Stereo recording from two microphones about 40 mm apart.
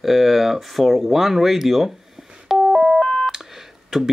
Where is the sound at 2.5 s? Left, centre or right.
Centre.